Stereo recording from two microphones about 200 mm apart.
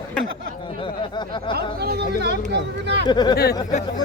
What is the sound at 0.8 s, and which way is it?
Speech, 25° left (ahead or behind).